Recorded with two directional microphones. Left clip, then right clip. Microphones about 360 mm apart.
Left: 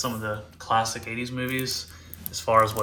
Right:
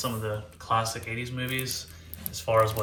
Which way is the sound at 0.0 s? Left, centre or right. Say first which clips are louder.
Left 2 dB; centre.